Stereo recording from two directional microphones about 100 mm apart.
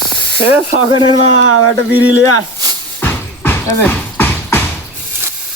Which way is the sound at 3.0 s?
20° left (ahead or behind).